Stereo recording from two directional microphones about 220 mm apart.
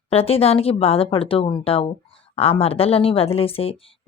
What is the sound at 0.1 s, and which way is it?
A woman's voice, 25° left (ahead or behind).